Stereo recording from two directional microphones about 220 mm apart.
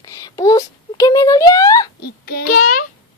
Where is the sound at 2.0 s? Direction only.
45° left (ahead or behind).